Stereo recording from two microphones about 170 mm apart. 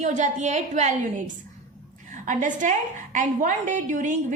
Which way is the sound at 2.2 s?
50° right (ahead or behind).